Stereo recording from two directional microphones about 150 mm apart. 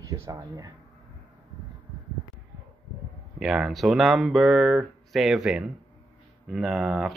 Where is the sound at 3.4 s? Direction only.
5° right (ahead or behind).